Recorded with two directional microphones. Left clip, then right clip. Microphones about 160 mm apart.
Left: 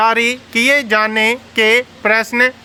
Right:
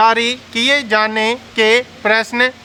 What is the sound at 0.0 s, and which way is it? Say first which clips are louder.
Speech: right 1 dB; 25° left (ahead or behind).